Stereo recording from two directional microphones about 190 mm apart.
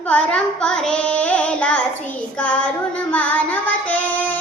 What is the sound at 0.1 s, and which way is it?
Child singing, 5° left (ahead or behind).